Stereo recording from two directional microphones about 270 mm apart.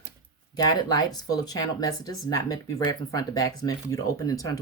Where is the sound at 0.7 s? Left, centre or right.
Centre.